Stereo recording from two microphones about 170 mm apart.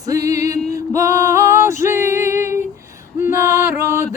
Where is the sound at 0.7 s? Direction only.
20° right (ahead or behind).